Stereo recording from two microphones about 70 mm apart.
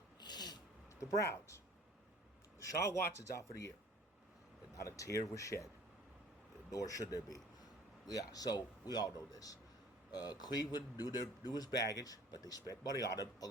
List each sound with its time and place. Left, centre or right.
0.2 s a sound: left
1.0 s speech: left
2.9 s speech: left
4.7 s speech: left
6.7 s a man's voice: left
10.1 s a man's voice: left